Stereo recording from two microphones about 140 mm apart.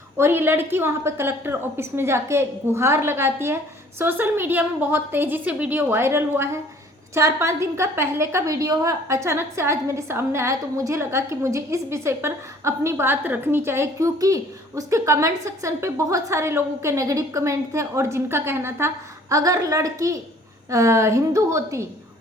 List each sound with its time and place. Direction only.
0.2 s a woman's voice: 15° right (ahead or behind)